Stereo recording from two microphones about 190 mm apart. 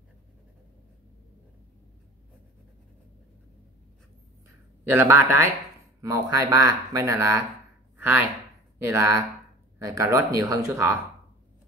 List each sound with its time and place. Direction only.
4.8 s speech: 10° right (ahead or behind)